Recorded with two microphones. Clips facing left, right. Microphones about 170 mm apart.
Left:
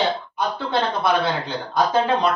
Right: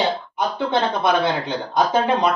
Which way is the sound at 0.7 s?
20° right (ahead or behind).